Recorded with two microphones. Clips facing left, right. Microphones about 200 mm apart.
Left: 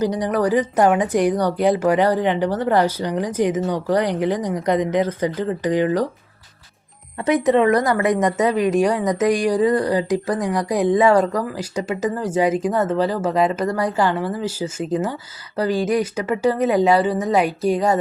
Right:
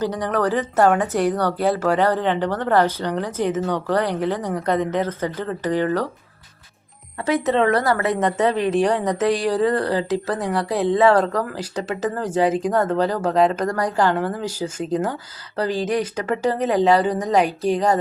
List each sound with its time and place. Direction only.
0.0 s speech: 10° left (ahead or behind)
7.2 s speech: 15° left (ahead or behind)